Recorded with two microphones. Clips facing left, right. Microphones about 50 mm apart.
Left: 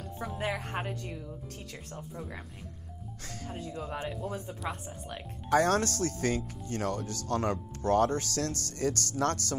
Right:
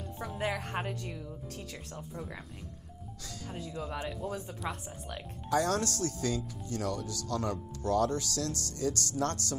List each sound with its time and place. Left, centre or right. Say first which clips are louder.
0.2 s speech: even; centre
3.5 s speech: even; centre
4.8 s speech: left 1 dB; left
5.5 s speech: left 4 dB; left